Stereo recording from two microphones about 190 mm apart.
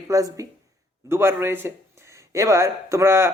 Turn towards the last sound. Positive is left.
turn(degrees=-15)  # may be behind; listen again after turning